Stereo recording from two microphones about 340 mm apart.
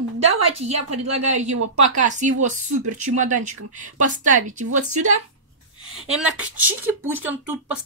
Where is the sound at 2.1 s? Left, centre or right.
Right.